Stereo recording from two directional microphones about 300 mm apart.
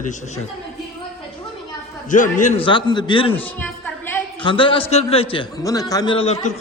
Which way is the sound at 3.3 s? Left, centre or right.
Centre.